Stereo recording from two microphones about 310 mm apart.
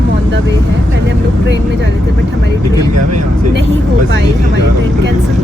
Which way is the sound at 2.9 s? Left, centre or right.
Right.